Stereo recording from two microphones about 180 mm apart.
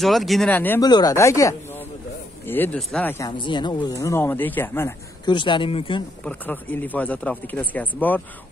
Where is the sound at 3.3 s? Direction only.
25° left (ahead or behind).